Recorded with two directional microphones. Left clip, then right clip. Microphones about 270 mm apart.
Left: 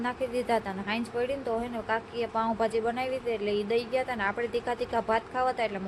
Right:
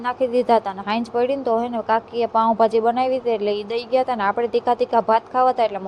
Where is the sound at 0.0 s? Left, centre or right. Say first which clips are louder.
Right 10 dB; centre.